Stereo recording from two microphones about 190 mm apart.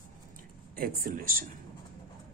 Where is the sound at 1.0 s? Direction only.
45° right (ahead or behind).